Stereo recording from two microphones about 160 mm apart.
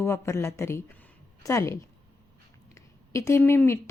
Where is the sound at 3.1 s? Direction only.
15° left (ahead or behind).